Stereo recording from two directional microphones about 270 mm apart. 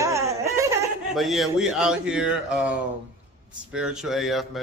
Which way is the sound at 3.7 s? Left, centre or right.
Centre.